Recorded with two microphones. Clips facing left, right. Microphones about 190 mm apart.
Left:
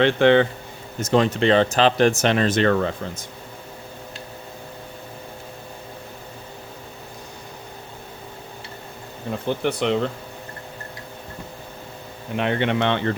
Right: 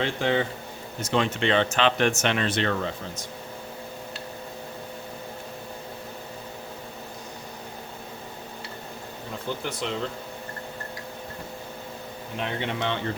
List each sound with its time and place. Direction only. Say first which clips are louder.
0.0 s speech: left 9 dB; 70° left (ahead or behind)
1.0 s speech: left 6 dB; 40° left (ahead or behind)
9.5 s speech: left 9 dB; 65° left (ahead or behind)
12.4 s speech: left 8 dB; 70° left (ahead or behind)